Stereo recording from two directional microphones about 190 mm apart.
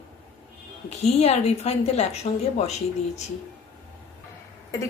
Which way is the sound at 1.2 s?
35° left (ahead or behind).